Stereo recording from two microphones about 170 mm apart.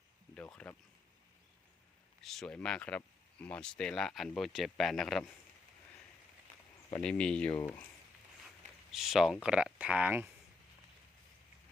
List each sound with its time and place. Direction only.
0.3 s speech: 5° left (ahead or behind)
2.2 s speech: centre (ahead or behind)
7.0 s speech: 5° left (ahead or behind)
8.9 s speech: centre (ahead or behind)